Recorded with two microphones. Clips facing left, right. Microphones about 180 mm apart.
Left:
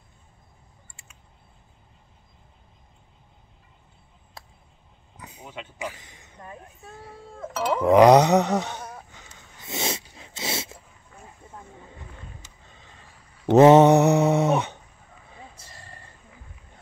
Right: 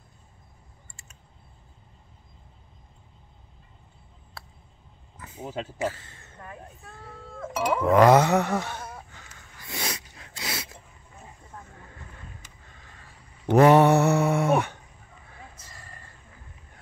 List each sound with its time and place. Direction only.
5.1 s a sound: 15° left (ahead or behind)
5.4 s speech: 40° right (ahead or behind)
5.8 s speech: 15° left (ahead or behind)
6.8 s a sound: 15° left (ahead or behind)
7.8 s speech: 20° left (ahead or behind)
9.6 s dog: 25° left (ahead or behind)
11.5 s wild animals: 15° left (ahead or behind)
13.5 s mantra: 20° left (ahead or behind)